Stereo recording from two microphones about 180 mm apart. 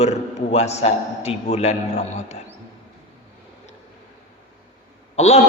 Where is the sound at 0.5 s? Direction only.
35° left (ahead or behind).